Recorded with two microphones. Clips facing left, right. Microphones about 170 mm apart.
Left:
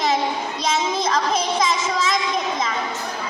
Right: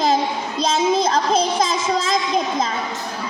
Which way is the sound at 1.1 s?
30° right (ahead or behind).